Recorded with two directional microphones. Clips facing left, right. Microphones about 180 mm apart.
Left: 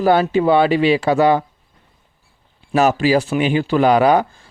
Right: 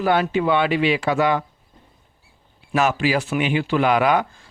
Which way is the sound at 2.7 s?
35° left (ahead or behind).